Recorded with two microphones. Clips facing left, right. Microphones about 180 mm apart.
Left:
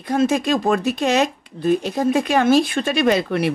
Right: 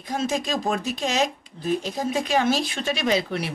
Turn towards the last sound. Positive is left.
turn(degrees=55)  # may be behind; listen again after turning